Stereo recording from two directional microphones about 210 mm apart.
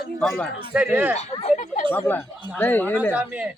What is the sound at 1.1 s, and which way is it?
Speech, 30° left (ahead or behind).